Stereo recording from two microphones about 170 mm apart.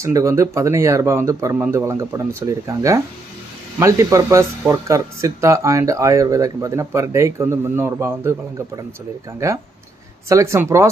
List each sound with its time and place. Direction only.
0.0 s speech: 20° right (ahead or behind)